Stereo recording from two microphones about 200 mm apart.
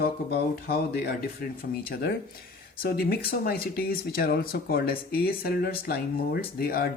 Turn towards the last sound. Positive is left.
turn(degrees=50)  # may be behind; listen again after turning